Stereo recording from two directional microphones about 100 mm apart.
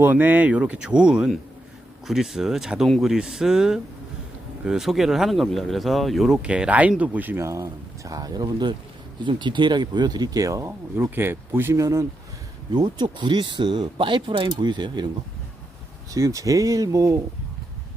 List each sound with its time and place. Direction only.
0.0 s speech: 15° right (ahead or behind)
12.7 s speech: 50° right (ahead or behind)
16.1 s speech: 35° right (ahead or behind)